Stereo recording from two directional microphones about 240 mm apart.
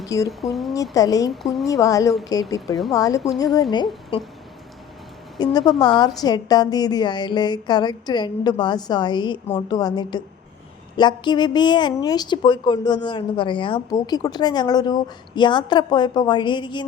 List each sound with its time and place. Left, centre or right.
0.3 s speech: centre
0.7 s a woman's voice: centre
1.3 s speech: centre
1.6 s a woman's voice: centre
5.4 s a woman's voice: centre